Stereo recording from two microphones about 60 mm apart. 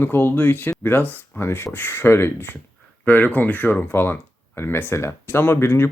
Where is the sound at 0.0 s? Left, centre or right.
Left.